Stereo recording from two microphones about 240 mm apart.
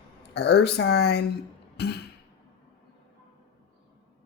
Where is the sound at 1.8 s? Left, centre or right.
Left.